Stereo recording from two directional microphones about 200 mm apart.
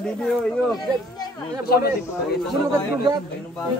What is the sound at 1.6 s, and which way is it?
Speech, 50° left (ahead or behind).